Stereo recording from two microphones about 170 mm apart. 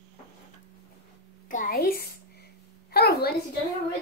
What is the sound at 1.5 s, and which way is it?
Speech, 55° left (ahead or behind).